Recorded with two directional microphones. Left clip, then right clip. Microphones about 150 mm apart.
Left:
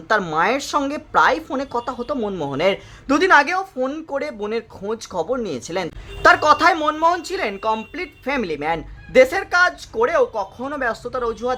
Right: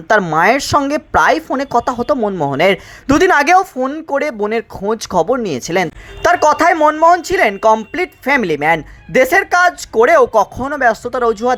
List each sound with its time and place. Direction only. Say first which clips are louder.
0.3 s speech: right 7 dB; 35° right (ahead or behind)
2.1 s speech: right 7 dB; 15° right (ahead or behind)
2.4 s speech: right 7 dB; 35° right (ahead or behind)
3.2 s a woman's voice: right 5 dB; 50° right (ahead or behind)
3.8 s speech: right 5 dB; 15° right (ahead or behind)
4.1 s speech: right 8 dB; 35° right (ahead or behind); by 10.5 s 50° right (ahead or behind)
10.6 s speech: right 9 dB; 30° right (ahead or behind)